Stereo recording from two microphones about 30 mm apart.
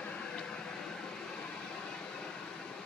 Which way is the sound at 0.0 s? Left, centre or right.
Left.